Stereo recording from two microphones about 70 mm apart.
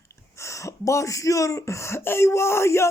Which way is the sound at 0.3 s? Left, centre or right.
Left.